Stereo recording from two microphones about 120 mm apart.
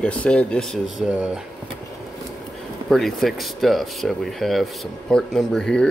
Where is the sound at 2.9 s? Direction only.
Centre (ahead or behind).